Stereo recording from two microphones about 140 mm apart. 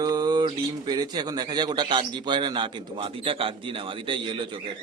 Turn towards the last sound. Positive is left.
turn(degrees=-35)  # may be behind; listen again after turning